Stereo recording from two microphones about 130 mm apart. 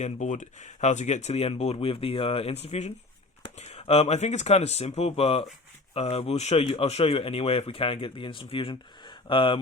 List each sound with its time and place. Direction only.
0.0 s speech: 70° left (ahead or behind); by 9.6 s 40° left (ahead or behind)